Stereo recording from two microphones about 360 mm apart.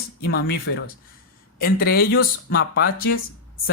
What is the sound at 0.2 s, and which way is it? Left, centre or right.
Speech, left.